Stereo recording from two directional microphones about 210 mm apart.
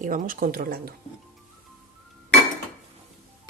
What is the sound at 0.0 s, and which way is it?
Cutlery, 40° right (ahead or behind).